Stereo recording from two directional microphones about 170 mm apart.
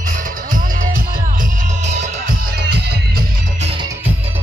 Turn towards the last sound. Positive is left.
turn(degrees=-35)  # may be behind; listen again after turning